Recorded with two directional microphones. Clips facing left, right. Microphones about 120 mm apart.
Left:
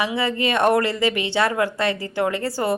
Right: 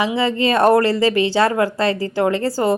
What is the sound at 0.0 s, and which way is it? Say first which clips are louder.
A woman's voice: right 4 dB; 25° right (ahead or behind).